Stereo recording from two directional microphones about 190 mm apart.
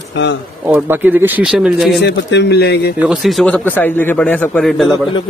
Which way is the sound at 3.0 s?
Centre (ahead or behind).